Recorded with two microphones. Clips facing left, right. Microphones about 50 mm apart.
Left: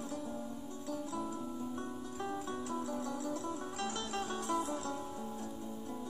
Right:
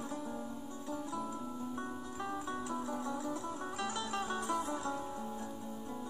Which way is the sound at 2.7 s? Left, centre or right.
Centre.